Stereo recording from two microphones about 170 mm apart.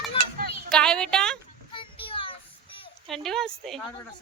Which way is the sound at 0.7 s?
5° left (ahead or behind).